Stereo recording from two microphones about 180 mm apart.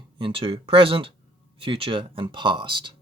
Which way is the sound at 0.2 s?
30° right (ahead or behind).